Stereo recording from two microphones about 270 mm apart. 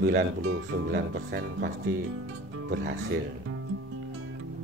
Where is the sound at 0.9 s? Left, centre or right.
Right.